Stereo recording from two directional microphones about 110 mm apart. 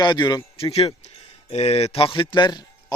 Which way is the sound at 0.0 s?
45° left (ahead or behind).